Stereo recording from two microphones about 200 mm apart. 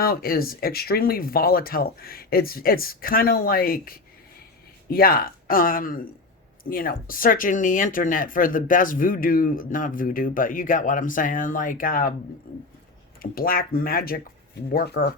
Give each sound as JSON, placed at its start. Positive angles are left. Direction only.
{"t": 0.0, "sound": "speech", "side_deg": 50}
{"t": 13.3, "sound": "speech", "side_deg": 45}